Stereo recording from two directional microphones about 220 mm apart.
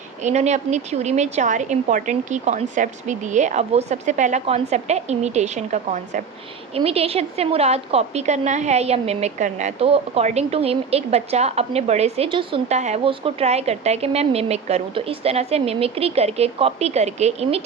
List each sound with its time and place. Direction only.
0.2 s a woman's voice: 30° right (ahead or behind)